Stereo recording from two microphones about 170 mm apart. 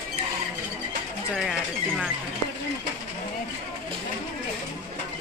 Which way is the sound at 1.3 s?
Centre (ahead or behind).